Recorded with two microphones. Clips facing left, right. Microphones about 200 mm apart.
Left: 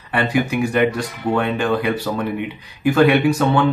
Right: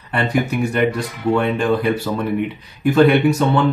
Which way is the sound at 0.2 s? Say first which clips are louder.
Even; centre (ahead or behind).